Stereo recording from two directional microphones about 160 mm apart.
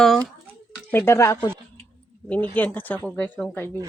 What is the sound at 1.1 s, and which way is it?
Speech, 20° left (ahead or behind).